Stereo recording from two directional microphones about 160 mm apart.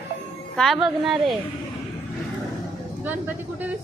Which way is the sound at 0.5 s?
Centre (ahead or behind).